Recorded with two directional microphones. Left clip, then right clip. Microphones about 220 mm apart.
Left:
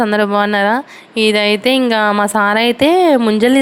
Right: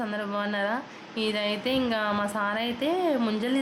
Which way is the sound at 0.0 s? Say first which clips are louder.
Left 17 dB; 40° left (ahead or behind).